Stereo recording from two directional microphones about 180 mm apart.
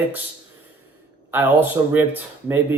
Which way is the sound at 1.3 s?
10° right (ahead or behind).